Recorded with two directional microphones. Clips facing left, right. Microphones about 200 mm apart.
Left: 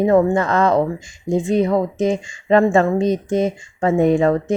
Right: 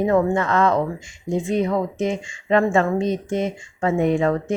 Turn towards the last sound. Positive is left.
turn(degrees=35)  # may be behind; listen again after turning